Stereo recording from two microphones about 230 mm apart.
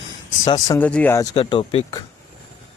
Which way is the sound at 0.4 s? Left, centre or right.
Centre.